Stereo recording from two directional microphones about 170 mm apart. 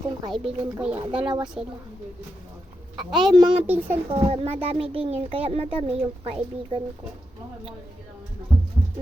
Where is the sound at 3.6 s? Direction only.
10° right (ahead or behind).